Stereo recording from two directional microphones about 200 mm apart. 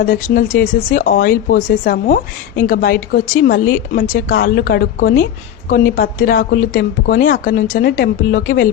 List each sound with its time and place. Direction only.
0.0 s a woman's voice: 45° left (ahead or behind)